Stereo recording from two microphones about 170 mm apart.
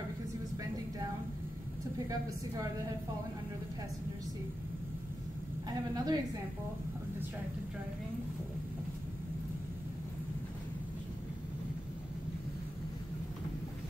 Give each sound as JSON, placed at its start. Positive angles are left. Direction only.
{"t": 5.7, "sound": "a woman's voice", "side_deg": -25}